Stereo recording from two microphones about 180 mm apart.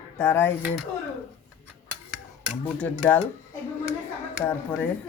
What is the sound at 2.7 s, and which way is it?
Speech, 10° left (ahead or behind).